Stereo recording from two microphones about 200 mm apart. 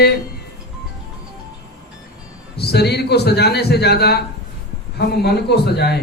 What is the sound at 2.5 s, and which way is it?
Speech, 55° left (ahead or behind).